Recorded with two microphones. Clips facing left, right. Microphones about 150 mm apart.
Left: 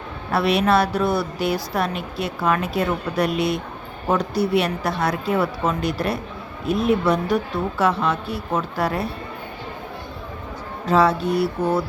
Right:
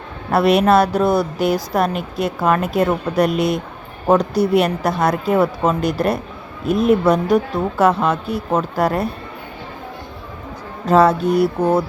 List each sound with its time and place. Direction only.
0.3 s a woman's voice: 45° right (ahead or behind)
10.8 s a woman's voice: 45° right (ahead or behind)